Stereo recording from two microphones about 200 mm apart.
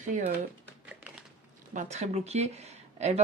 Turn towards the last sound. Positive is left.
turn(degrees=-35)  # may be behind; listen again after turning